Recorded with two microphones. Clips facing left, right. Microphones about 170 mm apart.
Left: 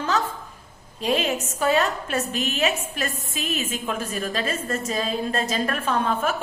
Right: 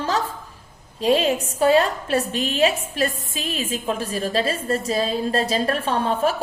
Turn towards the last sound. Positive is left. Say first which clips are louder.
# right 3 dB
turn(degrees=-35)  # may be behind; listen again after turning